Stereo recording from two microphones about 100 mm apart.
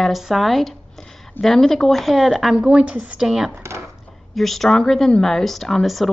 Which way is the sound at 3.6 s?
30° right (ahead or behind).